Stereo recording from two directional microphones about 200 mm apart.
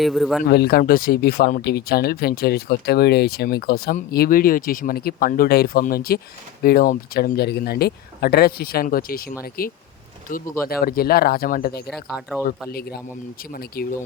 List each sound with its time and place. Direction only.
0.0 s speech: centre (ahead or behind)
0.5 s speech: 50° left (ahead or behind)
12.0 s speech: 5° right (ahead or behind)
13.5 s speech: 50° left (ahead or behind)